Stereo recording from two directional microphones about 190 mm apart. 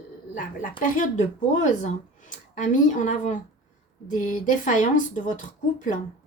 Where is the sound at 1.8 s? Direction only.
40° left (ahead or behind).